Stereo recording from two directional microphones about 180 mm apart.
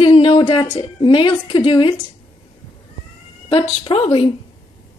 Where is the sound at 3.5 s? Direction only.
30° left (ahead or behind).